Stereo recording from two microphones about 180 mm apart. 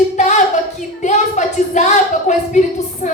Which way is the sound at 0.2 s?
40° left (ahead or behind).